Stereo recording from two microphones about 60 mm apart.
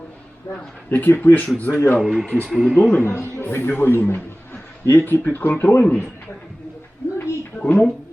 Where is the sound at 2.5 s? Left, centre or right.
Centre.